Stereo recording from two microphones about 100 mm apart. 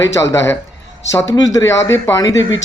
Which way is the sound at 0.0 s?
30° left (ahead or behind).